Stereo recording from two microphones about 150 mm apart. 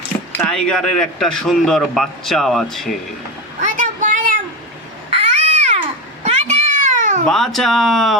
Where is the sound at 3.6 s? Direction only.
55° right (ahead or behind).